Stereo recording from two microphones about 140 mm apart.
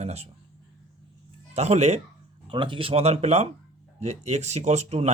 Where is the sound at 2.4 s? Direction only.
35° right (ahead or behind).